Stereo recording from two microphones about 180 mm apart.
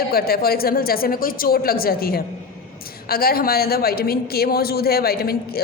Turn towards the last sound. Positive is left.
turn(degrees=60)  # may be behind; listen again after turning